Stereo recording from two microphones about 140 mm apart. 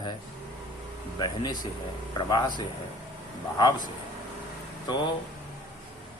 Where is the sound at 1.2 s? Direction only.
30° left (ahead or behind).